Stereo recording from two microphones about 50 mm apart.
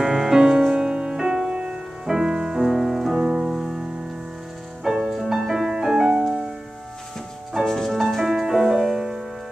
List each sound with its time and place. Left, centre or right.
0.0 s music: centre
4.8 s music: centre
7.6 s music: centre